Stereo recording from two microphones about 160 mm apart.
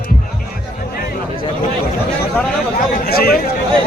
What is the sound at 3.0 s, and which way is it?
Speech, 75° left (ahead or behind).